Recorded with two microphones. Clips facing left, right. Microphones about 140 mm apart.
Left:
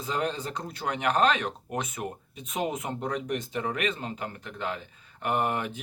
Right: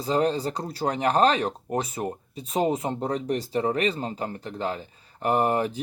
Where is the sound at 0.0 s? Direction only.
35° right (ahead or behind).